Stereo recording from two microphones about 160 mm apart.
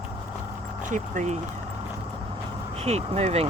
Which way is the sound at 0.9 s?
50° right (ahead or behind).